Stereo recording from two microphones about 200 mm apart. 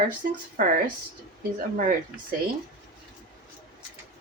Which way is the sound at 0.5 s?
45° right (ahead or behind).